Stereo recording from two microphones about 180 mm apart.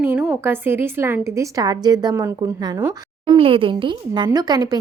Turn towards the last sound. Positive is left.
turn(degrees=-20)  # may be behind; listen again after turning